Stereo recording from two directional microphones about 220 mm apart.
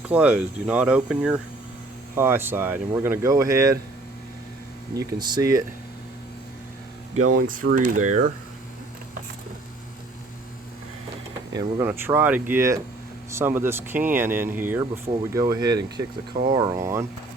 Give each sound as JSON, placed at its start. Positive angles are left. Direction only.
{"t": 0.1, "sound": "speech", "side_deg": -5}
{"t": 4.9, "sound": "speech", "side_deg": -15}
{"t": 7.3, "sound": "speech", "side_deg": -40}
{"t": 11.5, "sound": "speech", "side_deg": -10}